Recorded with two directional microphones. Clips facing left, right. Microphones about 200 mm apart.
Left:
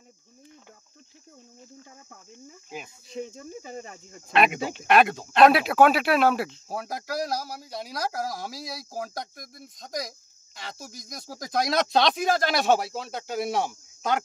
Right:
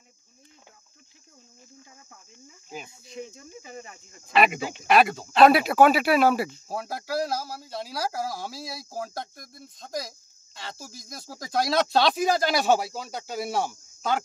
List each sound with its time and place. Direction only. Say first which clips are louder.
3.1 s speech: left 6 dB; 45° left (ahead or behind)
4.3 s speech: even; centre (ahead or behind)